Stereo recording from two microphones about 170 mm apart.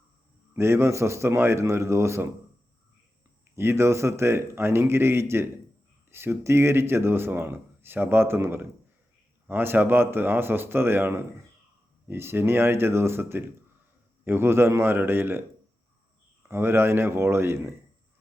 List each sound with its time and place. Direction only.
0.5 s speech: 15° right (ahead or behind)
3.5 s speech: 15° right (ahead or behind)
16.5 s speech: 15° right (ahead or behind)